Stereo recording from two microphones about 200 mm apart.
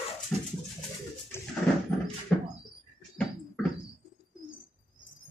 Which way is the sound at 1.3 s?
10° left (ahead or behind).